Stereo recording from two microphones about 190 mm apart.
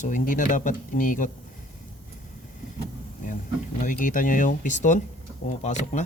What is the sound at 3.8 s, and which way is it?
Speech, 45° left (ahead or behind).